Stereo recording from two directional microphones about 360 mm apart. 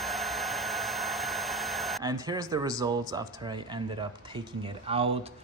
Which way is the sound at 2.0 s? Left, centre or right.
Centre.